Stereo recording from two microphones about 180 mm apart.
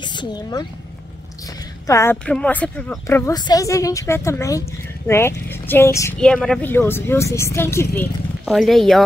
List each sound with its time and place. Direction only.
0.0 s speech: 25° left (ahead or behind)
1.9 s speech: 15° left (ahead or behind)
8.5 s speech: centre (ahead or behind)